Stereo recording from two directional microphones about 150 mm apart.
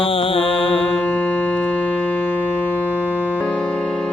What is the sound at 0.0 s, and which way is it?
Music, 35° left (ahead or behind).